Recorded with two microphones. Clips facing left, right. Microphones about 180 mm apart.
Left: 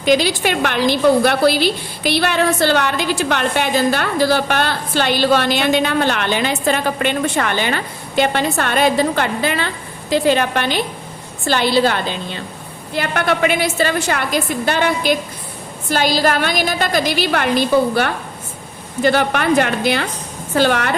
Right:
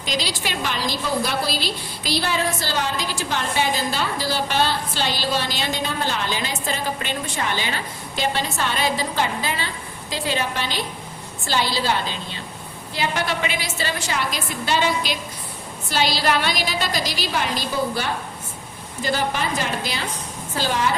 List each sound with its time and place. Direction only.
0.0 s a woman's voice: 60° left (ahead or behind)